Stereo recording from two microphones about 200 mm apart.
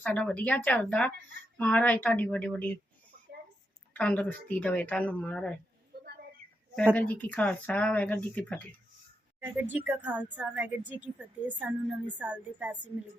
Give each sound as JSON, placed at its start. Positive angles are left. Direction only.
{"t": 0.0, "sound": "speech", "side_deg": 5}
{"t": 3.9, "sound": "speech", "side_deg": 5}
{"t": 5.9, "sound": "a sound", "side_deg": -50}
{"t": 6.9, "sound": "speech", "side_deg": 5}
{"t": 9.4, "sound": "a woman's voice", "side_deg": -10}